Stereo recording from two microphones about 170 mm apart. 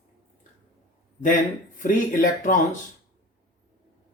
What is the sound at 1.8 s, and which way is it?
Speech, 50° left (ahead or behind).